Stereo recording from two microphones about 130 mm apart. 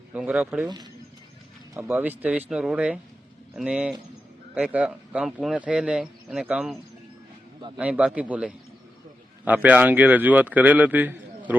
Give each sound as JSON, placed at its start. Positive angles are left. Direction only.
{"t": 0.1, "sound": "speech", "side_deg": -10}
{"t": 1.7, "sound": "speech", "side_deg": -15}
{"t": 7.8, "sound": "speech", "side_deg": -10}